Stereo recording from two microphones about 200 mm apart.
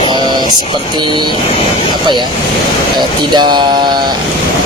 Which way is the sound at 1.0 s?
25° right (ahead or behind).